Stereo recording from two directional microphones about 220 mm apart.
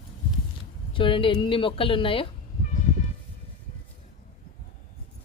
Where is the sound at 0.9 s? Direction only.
25° left (ahead or behind).